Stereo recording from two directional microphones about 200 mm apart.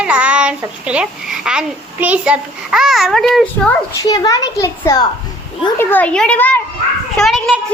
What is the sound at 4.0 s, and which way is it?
A child's voice, 20° left (ahead or behind).